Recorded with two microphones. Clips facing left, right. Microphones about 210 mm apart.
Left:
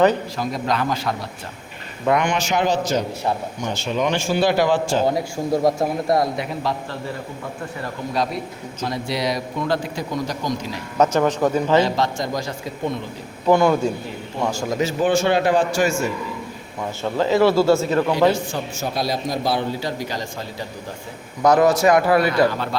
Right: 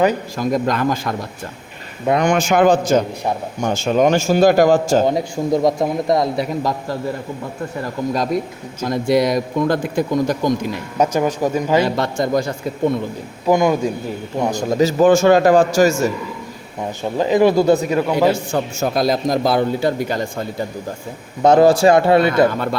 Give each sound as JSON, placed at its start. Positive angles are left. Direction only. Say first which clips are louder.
{"t": 0.3, "sound": "a man's voice", "louder": "right 5 dB", "side_deg": -50}
{"t": 2.1, "sound": "a man's voice", "louder": "right 8 dB", "side_deg": -45}
{"t": 5.0, "sound": "a man's voice", "louder": "right 3 dB", "side_deg": -20}
{"t": 6.3, "sound": "a man's voice", "louder": "right 4 dB", "side_deg": -40}
{"t": 8.1, "sound": "a man's voice", "louder": "right 2 dB", "side_deg": -45}
{"t": 10.9, "sound": "speech", "louder": "even", "side_deg": -10}
{"t": 11.9, "sound": "a man's voice", "louder": "right 5 dB", "side_deg": -55}
{"t": 13.5, "sound": "a man's voice", "louder": "right 1 dB", "side_deg": -15}
{"t": 14.8, "sound": "a man's voice", "louder": "right 7 dB", "side_deg": -40}
{"t": 17.0, "sound": "speech", "louder": "right 2 dB", "side_deg": -15}
{"t": 18.5, "sound": "a man's voice", "louder": "right 6 dB", "side_deg": -50}
{"t": 21.4, "sound": "a man's voice", "louder": "right 4 dB", "side_deg": -30}